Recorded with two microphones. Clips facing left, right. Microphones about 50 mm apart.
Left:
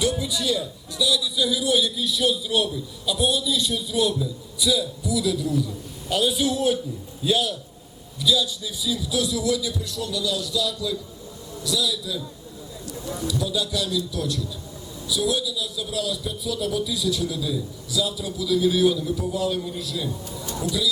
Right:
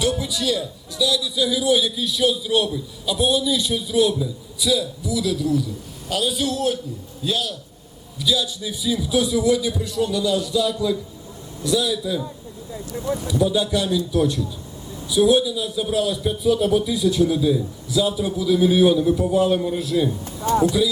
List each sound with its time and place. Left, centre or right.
0.0 s music: centre
0.3 s a man's voice: centre
8.2 s a man's voice: centre
8.6 s a man's voice: right